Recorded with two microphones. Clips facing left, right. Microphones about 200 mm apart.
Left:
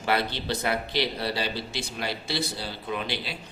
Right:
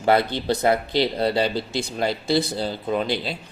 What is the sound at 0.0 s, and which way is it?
A woman's voice, 50° right (ahead or behind).